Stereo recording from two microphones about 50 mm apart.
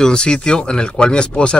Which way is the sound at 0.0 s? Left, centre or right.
Centre.